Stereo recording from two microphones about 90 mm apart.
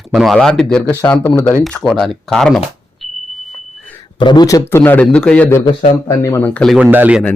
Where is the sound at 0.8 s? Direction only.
15° left (ahead or behind).